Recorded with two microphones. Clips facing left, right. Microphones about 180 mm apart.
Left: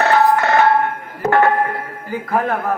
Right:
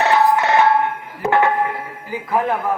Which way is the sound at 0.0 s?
50° left (ahead or behind).